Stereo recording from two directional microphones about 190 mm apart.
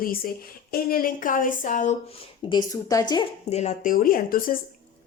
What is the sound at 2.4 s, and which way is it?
Speech, 20° left (ahead or behind).